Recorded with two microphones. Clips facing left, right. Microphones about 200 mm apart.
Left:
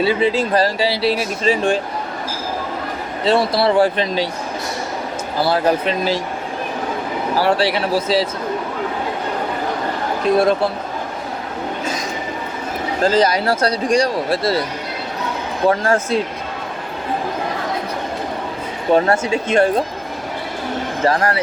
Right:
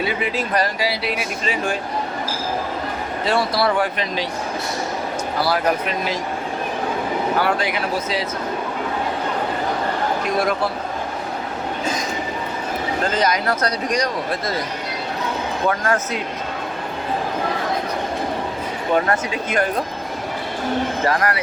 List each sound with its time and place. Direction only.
0.0 s speech: 30° left (ahead or behind)
3.2 s speech: 25° left (ahead or behind)
5.4 s speech: 25° left (ahead or behind)
7.3 s speech: 30° left (ahead or behind)
10.2 s speech: 25° left (ahead or behind)
13.0 s speech: 30° left (ahead or behind)
15.7 s speech: 30° left (ahead or behind)
18.9 s speech: 30° left (ahead or behind)
21.0 s speech: 30° left (ahead or behind)